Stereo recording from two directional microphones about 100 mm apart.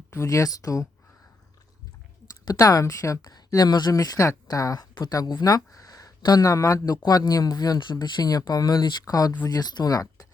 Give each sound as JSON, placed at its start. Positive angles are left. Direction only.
{"t": 0.1, "sound": "speech", "side_deg": 30}
{"t": 2.4, "sound": "speech", "side_deg": 40}